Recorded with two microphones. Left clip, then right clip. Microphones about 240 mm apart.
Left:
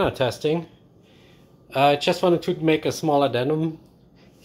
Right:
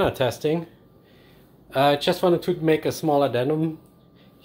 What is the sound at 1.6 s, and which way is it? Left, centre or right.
Speech, centre.